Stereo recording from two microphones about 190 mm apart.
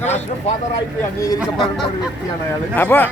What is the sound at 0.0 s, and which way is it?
Speech, 35° left (ahead or behind).